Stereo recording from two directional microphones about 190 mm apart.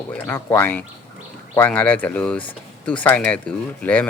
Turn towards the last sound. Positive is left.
turn(degrees=10)  # may be behind; listen again after turning